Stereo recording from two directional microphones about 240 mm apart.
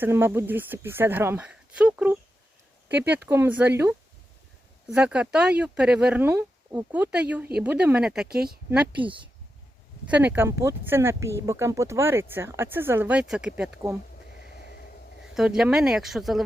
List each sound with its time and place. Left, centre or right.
0.0 s speech: centre
9.0 s speech: right
10.3 s speech: centre
14.5 s a sound: left
15.4 s speech: centre